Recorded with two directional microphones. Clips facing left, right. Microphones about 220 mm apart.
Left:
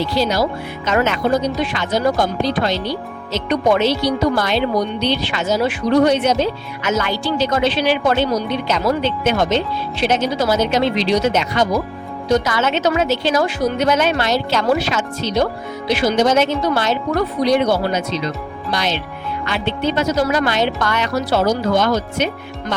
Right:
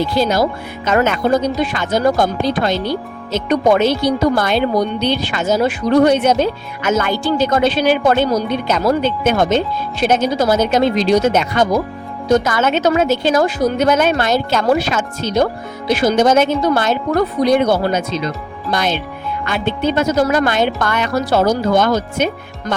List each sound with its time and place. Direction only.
0.0 s speech: 50° right (ahead or behind)